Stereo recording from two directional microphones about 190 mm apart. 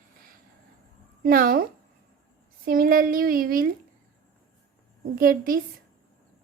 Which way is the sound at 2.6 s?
50° right (ahead or behind).